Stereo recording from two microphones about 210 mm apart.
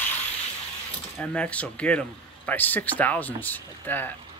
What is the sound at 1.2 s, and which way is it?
Speech, 5° left (ahead or behind).